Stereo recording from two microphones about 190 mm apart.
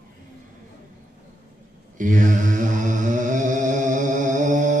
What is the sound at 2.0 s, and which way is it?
Mantra, 40° right (ahead or behind).